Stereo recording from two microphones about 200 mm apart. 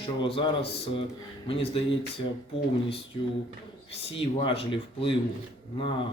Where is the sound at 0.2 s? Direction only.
25° left (ahead or behind).